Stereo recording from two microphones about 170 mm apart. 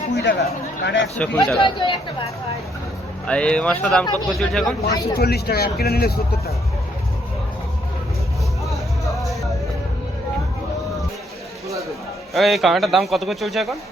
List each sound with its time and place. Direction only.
0.2 s speech: 80° left
1.1 s speech: 10° left (ahead or behind)
1.5 s speech: 30° left (ahead or behind)
3.2 s a man's voice: 5° left (ahead or behind)
5.1 s speech: 65° left (ahead or behind)
8.7 s music: centre (ahead or behind)
12.3 s a man's voice: centre (ahead or behind)